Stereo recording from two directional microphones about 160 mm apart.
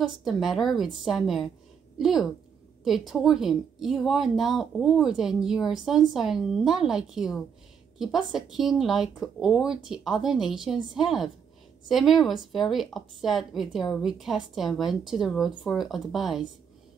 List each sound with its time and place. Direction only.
0.0 s a woman's voice: centre (ahead or behind)